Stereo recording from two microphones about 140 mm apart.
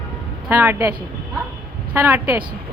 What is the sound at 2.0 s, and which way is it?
Speech, 15° right (ahead or behind).